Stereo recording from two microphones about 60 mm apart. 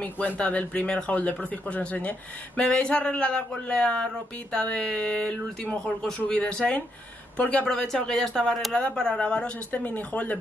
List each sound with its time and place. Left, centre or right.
0.0 s speech: left
9.7 s speech: left